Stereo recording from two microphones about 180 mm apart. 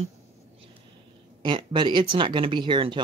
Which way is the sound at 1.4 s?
30° right (ahead or behind).